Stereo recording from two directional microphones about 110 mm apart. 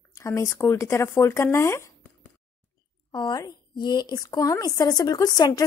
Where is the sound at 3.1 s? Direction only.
45° left (ahead or behind).